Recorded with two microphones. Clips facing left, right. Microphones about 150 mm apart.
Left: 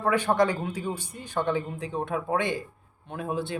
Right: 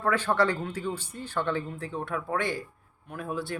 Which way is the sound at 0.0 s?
15° left (ahead or behind).